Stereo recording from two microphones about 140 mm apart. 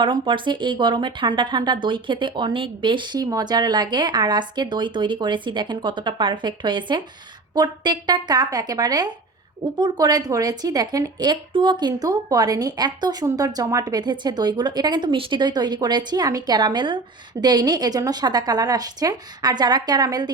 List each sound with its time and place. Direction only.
0.0 s a woman's voice: 35° right (ahead or behind)